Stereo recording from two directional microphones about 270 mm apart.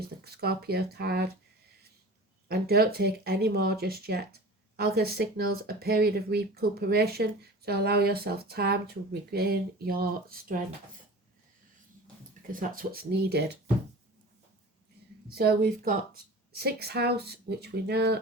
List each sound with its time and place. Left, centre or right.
0.3 s speech: right
2.5 s speech: right
12.5 s speech: right
15.3 s speech: right